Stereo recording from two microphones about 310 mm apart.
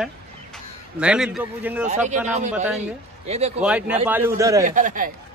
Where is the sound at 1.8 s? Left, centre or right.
Right.